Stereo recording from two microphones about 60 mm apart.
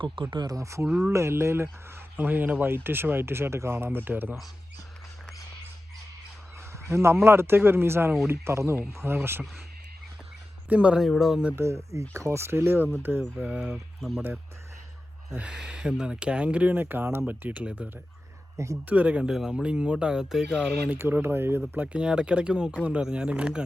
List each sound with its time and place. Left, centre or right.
0.4 s speech: right
2.1 s speech: right
6.8 s speech: right
10.7 s speech: right
11.2 s speech: centre
11.5 s speech: right
13.6 s speech: centre
15.4 s speech: centre; by 17.2 s right
17.2 s speech: right
18.5 s speech: right
18.9 s speech: right
21.0 s speech: right
21.9 s speech: centre